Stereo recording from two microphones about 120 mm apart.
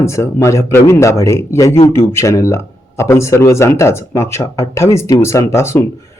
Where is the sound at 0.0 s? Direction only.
25° left (ahead or behind).